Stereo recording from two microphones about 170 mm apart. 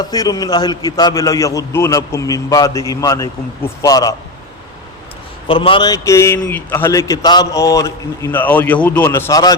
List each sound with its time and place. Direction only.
0.0 s a man's voice: 20° left (ahead or behind)
5.5 s a man's voice: 30° left (ahead or behind)